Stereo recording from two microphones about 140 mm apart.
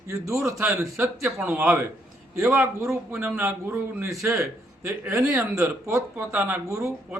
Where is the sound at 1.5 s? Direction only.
15° right (ahead or behind).